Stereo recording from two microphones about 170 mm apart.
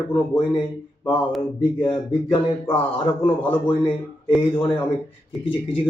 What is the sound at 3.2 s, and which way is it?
A man's voice, 10° left (ahead or behind).